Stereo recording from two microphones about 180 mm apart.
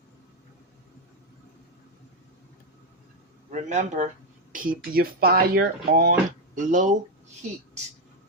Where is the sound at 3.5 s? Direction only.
40° right (ahead or behind); by 6.1 s 60° right (ahead or behind).